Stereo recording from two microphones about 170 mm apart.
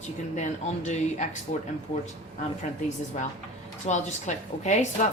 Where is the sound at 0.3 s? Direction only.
45° left (ahead or behind).